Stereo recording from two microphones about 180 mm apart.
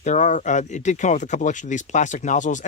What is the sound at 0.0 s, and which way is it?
Speech, 40° left (ahead or behind).